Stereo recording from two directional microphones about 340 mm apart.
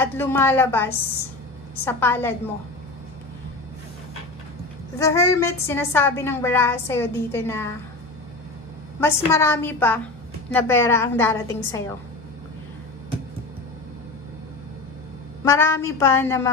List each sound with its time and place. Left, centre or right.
0.0 s a woman's voice: centre
4.9 s a woman's voice: centre
9.0 s a woman's voice: centre
15.4 s a woman's voice: centre